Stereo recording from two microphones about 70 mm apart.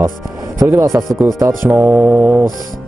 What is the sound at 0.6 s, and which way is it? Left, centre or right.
Speech, right.